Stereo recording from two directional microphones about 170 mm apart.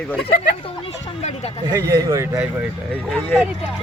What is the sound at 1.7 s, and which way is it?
Speech, 20° right (ahead or behind).